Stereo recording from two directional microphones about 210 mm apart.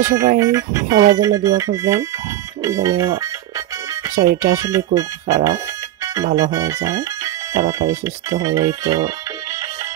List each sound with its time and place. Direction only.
0.0 s speech: 15° right (ahead or behind)